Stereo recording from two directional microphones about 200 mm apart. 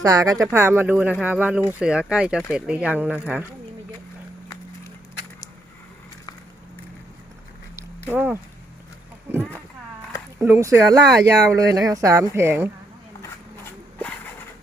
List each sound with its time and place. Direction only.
0.0 s speech: 15° right (ahead or behind)
7.8 s a sound: 10° right (ahead or behind)
9.3 s speech: 10° right (ahead or behind)